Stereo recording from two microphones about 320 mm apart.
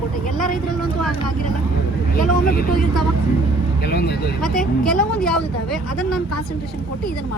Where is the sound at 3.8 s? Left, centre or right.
Left.